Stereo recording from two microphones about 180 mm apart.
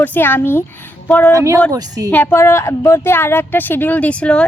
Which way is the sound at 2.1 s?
10° left (ahead or behind).